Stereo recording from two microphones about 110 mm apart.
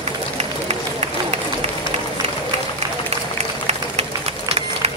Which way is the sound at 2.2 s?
90° right.